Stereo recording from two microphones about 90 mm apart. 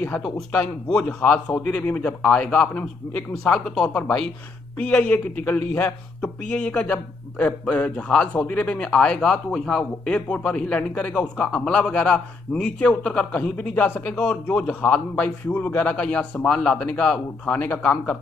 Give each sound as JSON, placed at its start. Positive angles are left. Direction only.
{"t": 0.8, "sound": "speech", "side_deg": 10}